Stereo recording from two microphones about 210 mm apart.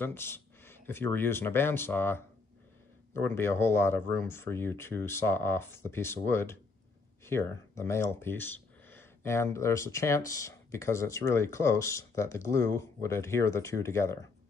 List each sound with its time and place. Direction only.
0.0 s speech: 10° left (ahead or behind)